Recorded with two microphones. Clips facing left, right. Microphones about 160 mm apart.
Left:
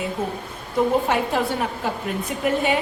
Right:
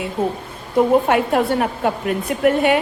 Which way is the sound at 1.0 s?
60° right (ahead or behind).